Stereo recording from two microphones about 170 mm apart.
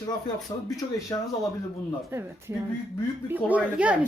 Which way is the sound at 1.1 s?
20° left (ahead or behind).